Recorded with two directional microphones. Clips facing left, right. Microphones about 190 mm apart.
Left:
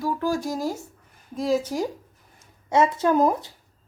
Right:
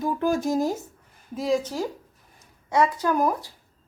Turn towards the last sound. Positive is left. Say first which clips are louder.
# left 3 dB
turn(degrees=20)  # may be behind; listen again after turning